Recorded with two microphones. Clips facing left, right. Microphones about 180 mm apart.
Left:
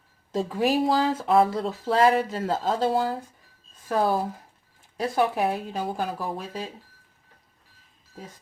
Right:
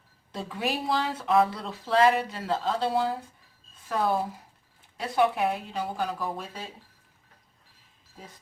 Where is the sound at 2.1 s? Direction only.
40° left (ahead or behind).